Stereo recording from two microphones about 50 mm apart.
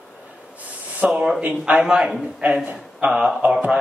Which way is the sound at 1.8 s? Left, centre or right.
Centre.